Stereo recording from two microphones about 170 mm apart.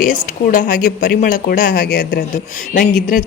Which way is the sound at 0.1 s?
50° left (ahead or behind).